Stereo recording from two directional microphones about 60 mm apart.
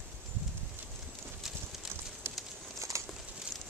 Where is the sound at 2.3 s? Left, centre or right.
Right.